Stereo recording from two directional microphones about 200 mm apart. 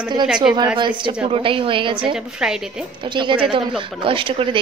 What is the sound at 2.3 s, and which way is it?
Speech, 5° right (ahead or behind).